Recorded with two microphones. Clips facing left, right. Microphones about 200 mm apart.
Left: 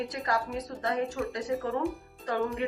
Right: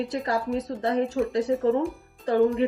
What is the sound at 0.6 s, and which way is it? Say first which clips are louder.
Speech: right 5 dB; 30° right (ahead or behind).